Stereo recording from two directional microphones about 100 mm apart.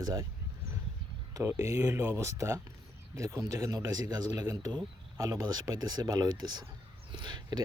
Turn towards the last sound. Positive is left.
turn(degrees=-50)  # may be behind; listen again after turning